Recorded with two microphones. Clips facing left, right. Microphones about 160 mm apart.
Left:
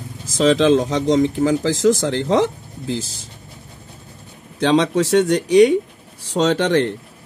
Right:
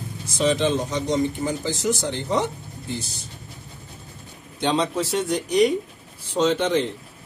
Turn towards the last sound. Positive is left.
turn(degrees=75)  # may be behind; listen again after turning